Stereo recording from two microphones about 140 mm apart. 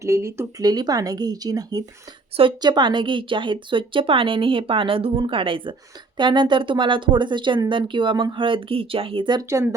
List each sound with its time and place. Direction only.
0.0 s speech: 20° right (ahead or behind)
9.5 s speech: 20° right (ahead or behind)